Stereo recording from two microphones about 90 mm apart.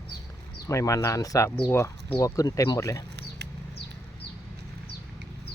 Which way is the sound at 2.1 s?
40° left (ahead or behind).